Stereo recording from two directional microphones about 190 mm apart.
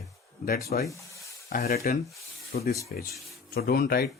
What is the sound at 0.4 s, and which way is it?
Speech, 55° left (ahead or behind).